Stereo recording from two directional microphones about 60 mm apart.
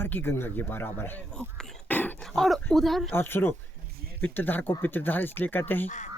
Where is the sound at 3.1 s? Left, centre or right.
Left.